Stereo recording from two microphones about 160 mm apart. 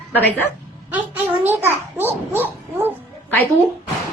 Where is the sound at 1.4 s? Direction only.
15° right (ahead or behind).